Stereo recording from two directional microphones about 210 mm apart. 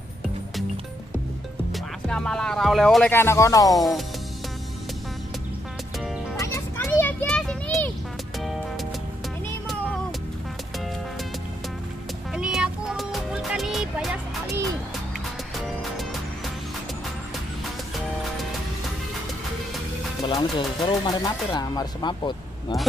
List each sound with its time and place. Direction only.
1.7 s speech: 5° left (ahead or behind)
3.7 s speech: centre (ahead or behind)
6.4 s a sound: 15° left (ahead or behind)
8.4 s music: centre (ahead or behind)
12.4 s music: centre (ahead or behind)
20.2 s speech: 20° left (ahead or behind)